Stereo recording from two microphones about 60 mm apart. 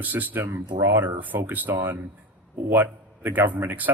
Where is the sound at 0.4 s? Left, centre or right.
Right.